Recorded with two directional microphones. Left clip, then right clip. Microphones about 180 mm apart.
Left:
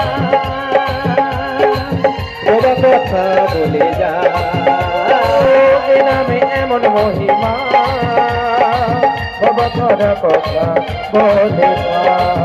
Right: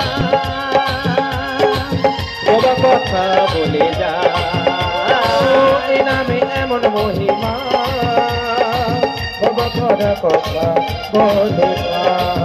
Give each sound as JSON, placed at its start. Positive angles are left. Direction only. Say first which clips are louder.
{"t": 0.3, "sound": "music", "louder": "left 2 dB", "side_deg": 30}